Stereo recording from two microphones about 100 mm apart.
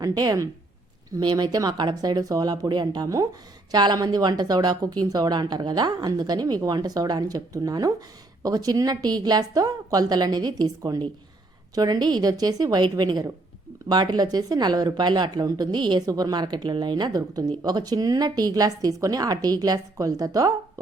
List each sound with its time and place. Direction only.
0.0 s a woman's voice: 40° right (ahead or behind)